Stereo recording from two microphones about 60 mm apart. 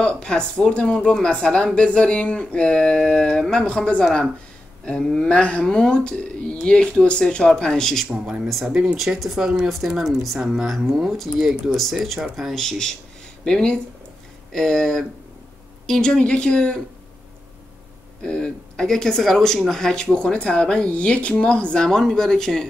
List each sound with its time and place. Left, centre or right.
0.0 s speech: centre
8.6 s speech: centre
18.2 s speech: centre